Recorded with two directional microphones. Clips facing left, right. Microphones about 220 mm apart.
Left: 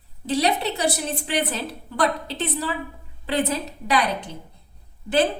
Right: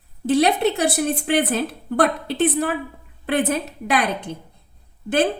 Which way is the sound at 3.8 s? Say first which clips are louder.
Even; 50° right (ahead or behind).